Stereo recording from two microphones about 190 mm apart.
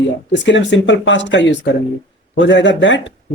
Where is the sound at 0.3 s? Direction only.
70° left (ahead or behind).